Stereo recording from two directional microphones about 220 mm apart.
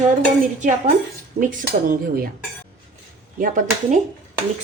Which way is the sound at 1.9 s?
40° right (ahead or behind).